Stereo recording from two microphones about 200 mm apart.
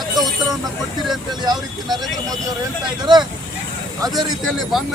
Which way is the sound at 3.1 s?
20° right (ahead or behind).